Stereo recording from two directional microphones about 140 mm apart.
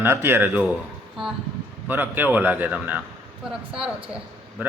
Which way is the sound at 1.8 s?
15° right (ahead or behind).